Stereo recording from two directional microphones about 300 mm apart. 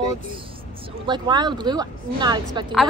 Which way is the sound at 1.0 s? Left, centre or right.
Centre.